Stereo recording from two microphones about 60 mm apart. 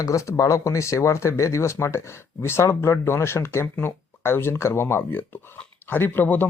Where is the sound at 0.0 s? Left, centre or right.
Left.